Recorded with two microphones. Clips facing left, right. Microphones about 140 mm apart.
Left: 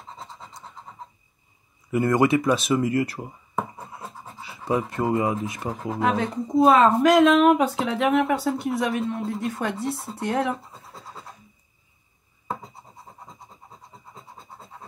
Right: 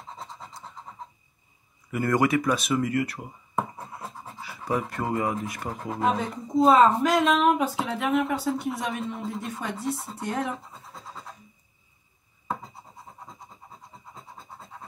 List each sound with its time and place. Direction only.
0.0 s scratch: centre (ahead or behind)
1.9 s speech: 25° left (ahead or behind)
3.2 s scratch: centre (ahead or behind)
4.6 s speech: centre (ahead or behind)
4.9 s speech: 25° left (ahead or behind)
5.2 s speech: centre (ahead or behind)
7.8 s speech: 90° left
8.3 s speech: centre (ahead or behind)
14.1 s scratch: centre (ahead or behind)